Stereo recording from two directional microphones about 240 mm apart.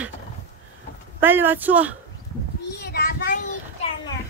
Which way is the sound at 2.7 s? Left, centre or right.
Left.